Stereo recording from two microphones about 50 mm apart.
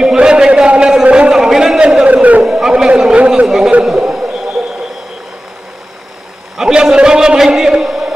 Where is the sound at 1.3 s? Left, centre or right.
Centre.